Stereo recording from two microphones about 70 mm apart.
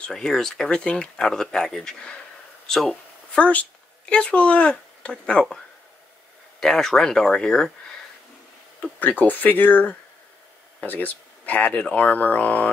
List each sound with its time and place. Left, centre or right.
0.0 s speech: centre
3.3 s speech: centre
6.6 s speech: centre
9.0 s speech: left